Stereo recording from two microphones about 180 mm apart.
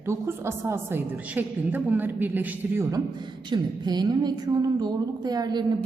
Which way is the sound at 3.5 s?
25° right (ahead or behind).